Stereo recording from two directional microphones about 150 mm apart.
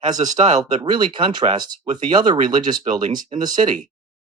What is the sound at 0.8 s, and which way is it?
Speech, 30° right (ahead or behind).